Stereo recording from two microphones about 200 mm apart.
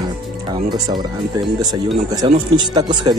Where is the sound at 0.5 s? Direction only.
20° right (ahead or behind).